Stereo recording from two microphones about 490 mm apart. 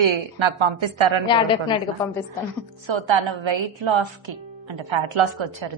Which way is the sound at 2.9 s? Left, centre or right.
Right.